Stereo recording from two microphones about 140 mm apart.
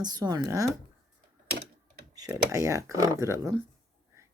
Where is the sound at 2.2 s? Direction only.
25° right (ahead or behind).